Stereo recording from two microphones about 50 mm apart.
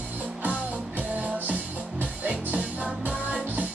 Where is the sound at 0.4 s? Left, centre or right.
Right.